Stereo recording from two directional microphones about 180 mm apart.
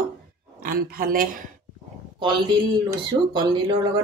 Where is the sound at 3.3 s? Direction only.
25° right (ahead or behind).